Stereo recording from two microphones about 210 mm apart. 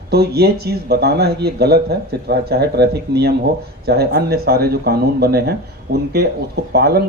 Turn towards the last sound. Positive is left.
turn(degrees=-50)  # may be behind; listen again after turning